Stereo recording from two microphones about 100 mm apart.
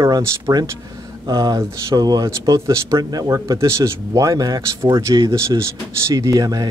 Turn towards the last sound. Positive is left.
turn(degrees=-35)  # may be behind; listen again after turning